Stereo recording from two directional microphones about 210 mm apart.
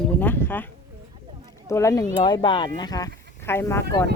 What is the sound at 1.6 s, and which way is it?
Speech, 15° left (ahead or behind).